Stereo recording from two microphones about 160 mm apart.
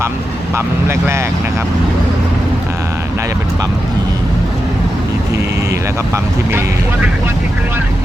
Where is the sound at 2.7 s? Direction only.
15° right (ahead or behind).